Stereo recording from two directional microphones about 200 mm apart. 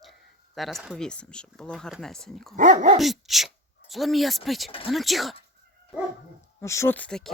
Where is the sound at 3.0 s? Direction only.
Centre (ahead or behind).